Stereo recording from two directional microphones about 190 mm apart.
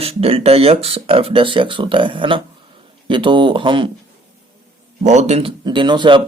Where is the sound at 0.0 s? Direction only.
30° right (ahead or behind).